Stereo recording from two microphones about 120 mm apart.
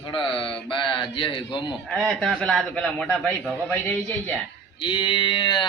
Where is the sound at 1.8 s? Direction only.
5° left (ahead or behind).